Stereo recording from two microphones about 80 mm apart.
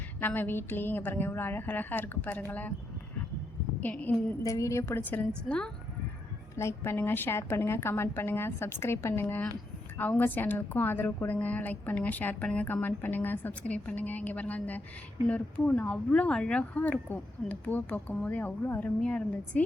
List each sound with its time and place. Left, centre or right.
0.2 s a woman's voice: left
3.8 s a woman's voice: centre
4.4 s a woman's voice: left
4.9 s a woman's voice: left
5.5 s speech: centre
6.6 s a woman's voice: left; by 19.6 s centre